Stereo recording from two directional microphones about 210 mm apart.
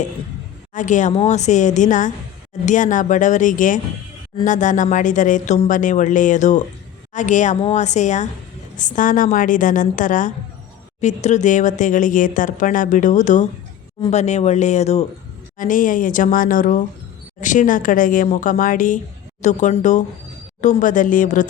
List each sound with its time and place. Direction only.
0.7 s speech: 35° left (ahead or behind)